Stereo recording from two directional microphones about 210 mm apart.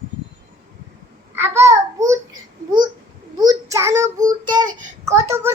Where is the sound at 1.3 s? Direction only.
10° right (ahead or behind).